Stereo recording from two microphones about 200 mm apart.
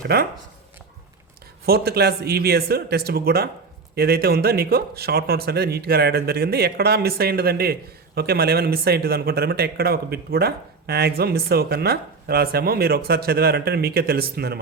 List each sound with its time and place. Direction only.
0.1 s speech: 50° right (ahead or behind)
1.6 s speech: 50° right (ahead or behind)